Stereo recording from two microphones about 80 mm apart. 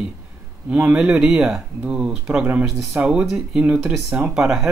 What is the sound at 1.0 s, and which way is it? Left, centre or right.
Speech, centre.